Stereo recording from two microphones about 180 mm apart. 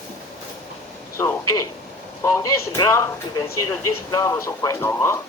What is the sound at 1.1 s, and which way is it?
Speech, 15° left (ahead or behind).